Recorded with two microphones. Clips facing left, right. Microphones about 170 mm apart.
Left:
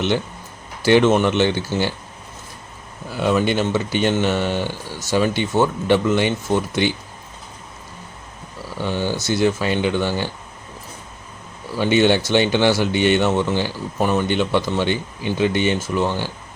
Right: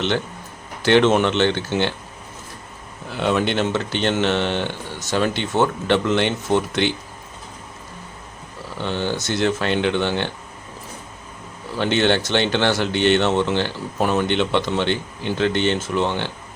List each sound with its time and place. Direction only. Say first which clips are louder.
0.9 s speech: left 1 dB; 5° left (ahead or behind)
3.1 s speech: left 2 dB; 5° left (ahead or behind)
8.8 s speech: left 1 dB; 10° left (ahead or behind)
11.8 s speech: left 3 dB; 10° left (ahead or behind)